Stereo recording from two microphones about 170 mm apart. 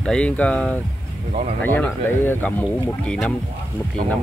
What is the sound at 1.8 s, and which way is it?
Speech, 10° left (ahead or behind).